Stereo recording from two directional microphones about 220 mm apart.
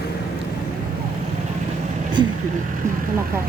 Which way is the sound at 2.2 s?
20° right (ahead or behind).